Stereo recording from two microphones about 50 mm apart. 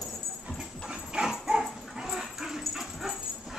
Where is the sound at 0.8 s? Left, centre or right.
Centre.